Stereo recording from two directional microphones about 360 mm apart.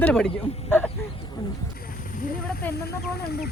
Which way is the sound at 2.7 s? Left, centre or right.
Left.